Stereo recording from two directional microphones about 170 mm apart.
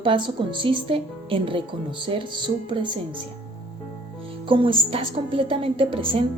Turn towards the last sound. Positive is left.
turn(degrees=-30)  # may be behind; listen again after turning